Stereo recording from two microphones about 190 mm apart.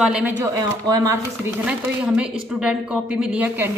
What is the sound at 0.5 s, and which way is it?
Speech, 20° right (ahead or behind).